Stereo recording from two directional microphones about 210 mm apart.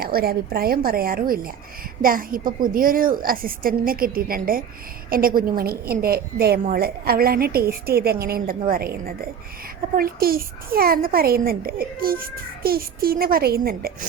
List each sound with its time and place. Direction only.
0.0 s a woman's voice: 45° right (ahead or behind)